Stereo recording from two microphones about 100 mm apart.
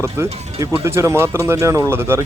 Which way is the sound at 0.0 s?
25° right (ahead or behind).